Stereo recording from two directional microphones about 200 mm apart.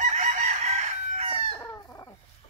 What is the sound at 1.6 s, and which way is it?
Chicken, 15° left (ahead or behind).